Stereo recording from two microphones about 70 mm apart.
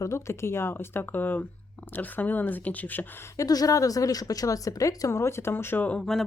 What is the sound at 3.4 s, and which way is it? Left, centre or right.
A woman's voice, left.